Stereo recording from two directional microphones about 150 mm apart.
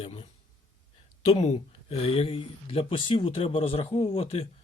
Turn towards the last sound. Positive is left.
turn(degrees=40)  # may be behind; listen again after turning